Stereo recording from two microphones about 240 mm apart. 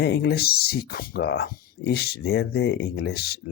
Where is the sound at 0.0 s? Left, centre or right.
Left.